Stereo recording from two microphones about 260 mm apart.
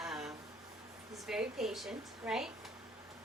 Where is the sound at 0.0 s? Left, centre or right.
Centre.